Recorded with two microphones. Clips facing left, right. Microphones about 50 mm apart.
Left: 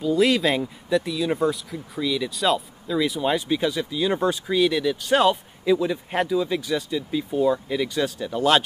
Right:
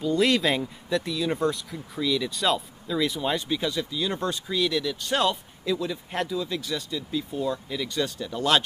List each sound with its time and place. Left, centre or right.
0.0 s speech: centre